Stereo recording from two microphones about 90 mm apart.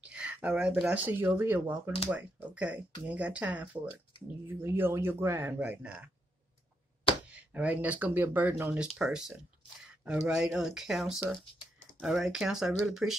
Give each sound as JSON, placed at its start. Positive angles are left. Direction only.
{"t": 0.0, "sound": "speech", "side_deg": -10}
{"t": 4.5, "sound": "speech", "side_deg": -25}
{"t": 7.3, "sound": "speech", "side_deg": -15}
{"t": 8.7, "sound": "speech", "side_deg": -10}